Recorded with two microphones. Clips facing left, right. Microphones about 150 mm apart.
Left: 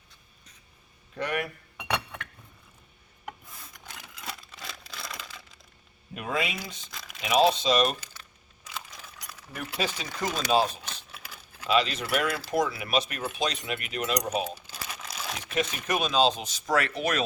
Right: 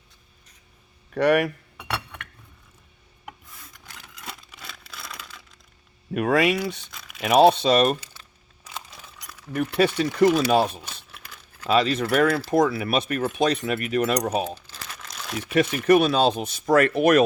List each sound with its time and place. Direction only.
1.1 s speech: 70° right (ahead or behind)
4.3 s crumpling: centre (ahead or behind)
6.1 s speech: 65° right (ahead or behind)
9.6 s speech: 55° right (ahead or behind)
10.8 s crumpling: 10° right (ahead or behind)
11.6 s speech: 45° right (ahead or behind)
14.7 s crumpling: 5° left (ahead or behind)
15.5 s speech: 65° right (ahead or behind)